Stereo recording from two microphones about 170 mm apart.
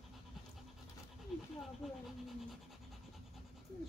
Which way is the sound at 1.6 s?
Centre (ahead or behind).